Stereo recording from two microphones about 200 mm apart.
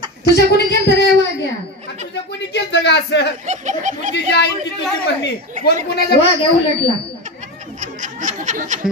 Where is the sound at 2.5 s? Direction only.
60° left (ahead or behind).